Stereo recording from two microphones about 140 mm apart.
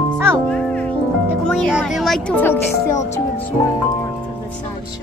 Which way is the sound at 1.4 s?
5° left (ahead or behind).